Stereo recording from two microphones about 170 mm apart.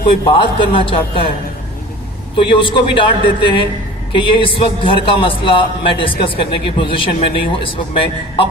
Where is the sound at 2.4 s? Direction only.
30° left (ahead or behind).